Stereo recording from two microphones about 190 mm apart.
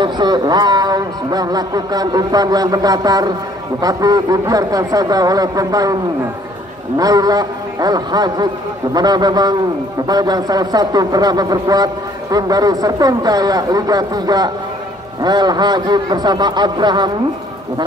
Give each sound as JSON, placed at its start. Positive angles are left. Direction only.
{"t": 0.0, "sound": "a man's voice", "side_deg": -20}
{"t": 7.0, "sound": "a man's voice", "side_deg": -20}